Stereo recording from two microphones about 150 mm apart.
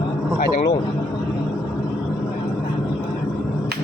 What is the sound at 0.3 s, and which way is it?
Speech, 85° left.